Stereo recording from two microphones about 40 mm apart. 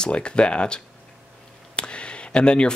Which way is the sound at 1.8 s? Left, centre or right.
Left.